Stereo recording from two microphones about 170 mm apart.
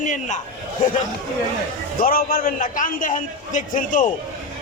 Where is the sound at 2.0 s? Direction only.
60° left (ahead or behind).